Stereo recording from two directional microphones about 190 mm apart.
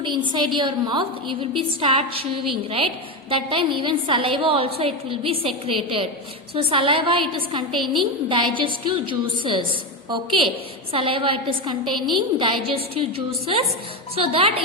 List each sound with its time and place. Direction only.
0.0 s a woman's voice: 25° right (ahead or behind)